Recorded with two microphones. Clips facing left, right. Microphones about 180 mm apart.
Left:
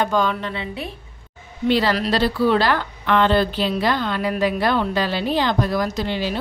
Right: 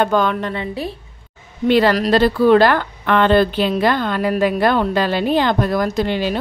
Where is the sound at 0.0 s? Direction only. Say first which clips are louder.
Right 4 dB; 55° right (ahead or behind).